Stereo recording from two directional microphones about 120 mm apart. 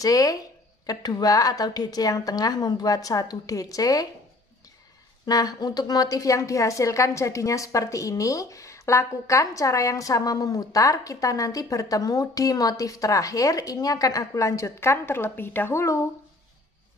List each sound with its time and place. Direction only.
0.0 s a woman's voice: 30° left (ahead or behind)
5.2 s a woman's voice: 30° left (ahead or behind)